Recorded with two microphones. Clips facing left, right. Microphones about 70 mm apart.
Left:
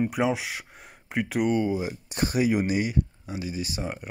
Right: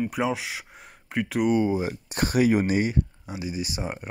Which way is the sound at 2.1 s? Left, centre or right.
Right.